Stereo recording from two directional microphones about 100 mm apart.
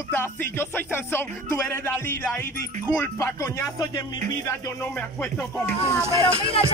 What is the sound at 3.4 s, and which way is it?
Speech, 35° left (ahead or behind).